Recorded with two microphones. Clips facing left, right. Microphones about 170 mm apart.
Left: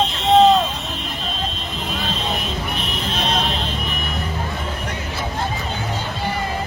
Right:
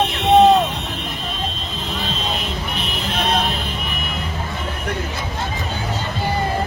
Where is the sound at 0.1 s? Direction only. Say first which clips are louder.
Right 1 dB; 60° right (ahead or behind).